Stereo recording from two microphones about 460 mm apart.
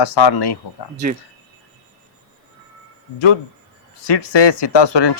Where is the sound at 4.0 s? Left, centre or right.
Left.